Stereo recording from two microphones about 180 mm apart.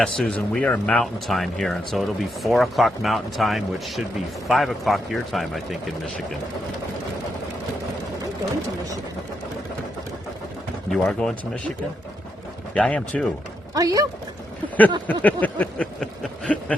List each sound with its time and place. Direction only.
0.0 s speech: 5° left (ahead or behind)
10.8 s speech: centre (ahead or behind)
12.7 s speech: 5° left (ahead or behind)
13.7 s speech: 20° right (ahead or behind)
15.0 s a sound: 10° left (ahead or behind)